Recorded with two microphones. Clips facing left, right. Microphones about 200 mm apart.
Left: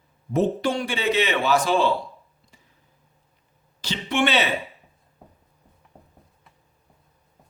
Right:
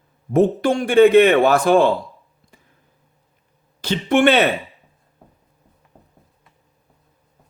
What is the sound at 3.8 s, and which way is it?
Speech, 50° right (ahead or behind).